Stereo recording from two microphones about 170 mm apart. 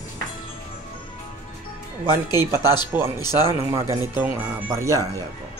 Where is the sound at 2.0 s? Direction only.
25° left (ahead or behind).